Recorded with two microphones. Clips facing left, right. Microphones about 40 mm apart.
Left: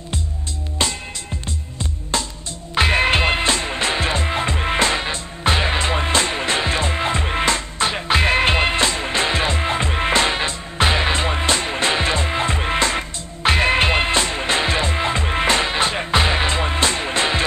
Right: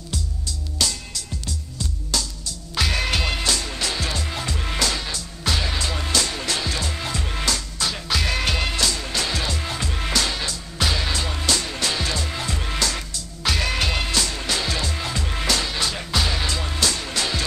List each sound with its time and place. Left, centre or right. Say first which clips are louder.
0.8 s music: left 3 dB; left